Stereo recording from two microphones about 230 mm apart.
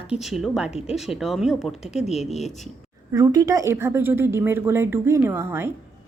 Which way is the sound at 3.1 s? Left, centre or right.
Centre.